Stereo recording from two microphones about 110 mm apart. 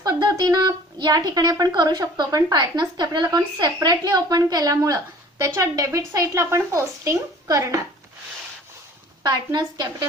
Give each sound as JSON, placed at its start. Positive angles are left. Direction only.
{"t": 0.0, "sound": "a woman's voice", "side_deg": -35}
{"t": 9.2, "sound": "a woman's voice", "side_deg": -40}